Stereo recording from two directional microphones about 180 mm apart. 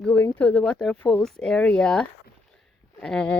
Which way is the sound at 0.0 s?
5° left (ahead or behind).